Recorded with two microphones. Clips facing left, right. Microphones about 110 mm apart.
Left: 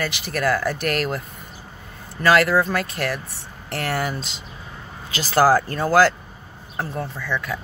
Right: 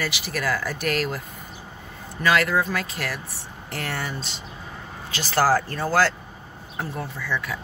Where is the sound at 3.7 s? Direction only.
90° left.